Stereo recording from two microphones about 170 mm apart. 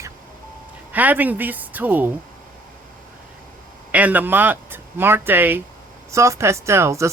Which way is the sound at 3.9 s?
10° right (ahead or behind).